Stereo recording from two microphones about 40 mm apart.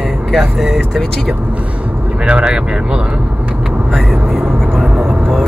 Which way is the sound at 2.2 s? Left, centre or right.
Right.